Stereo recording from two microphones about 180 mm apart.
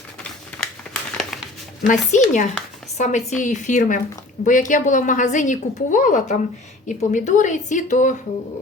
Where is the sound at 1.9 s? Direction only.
45° left (ahead or behind).